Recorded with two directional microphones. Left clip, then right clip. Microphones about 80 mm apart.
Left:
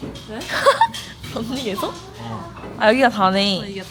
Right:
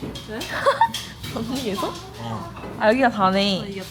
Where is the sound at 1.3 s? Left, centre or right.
Left.